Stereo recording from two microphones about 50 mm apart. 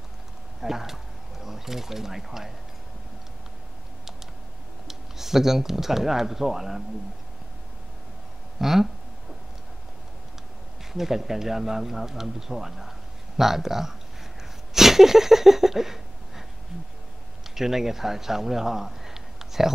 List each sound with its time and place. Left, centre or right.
0.6 s speech: centre
4.8 s speech: centre
8.5 s a sound: centre
10.9 s speech: centre
14.7 s a sound: centre
17.6 s a man's voice: centre